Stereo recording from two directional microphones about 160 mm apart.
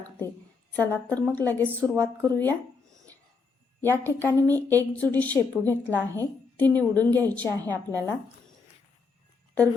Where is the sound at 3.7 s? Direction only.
10° left (ahead or behind).